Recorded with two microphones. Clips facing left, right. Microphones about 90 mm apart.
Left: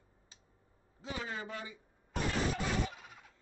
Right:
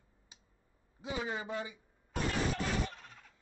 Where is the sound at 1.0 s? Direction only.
15° right (ahead or behind).